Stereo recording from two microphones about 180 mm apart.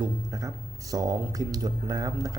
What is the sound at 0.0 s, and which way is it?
Speech, 20° right (ahead or behind).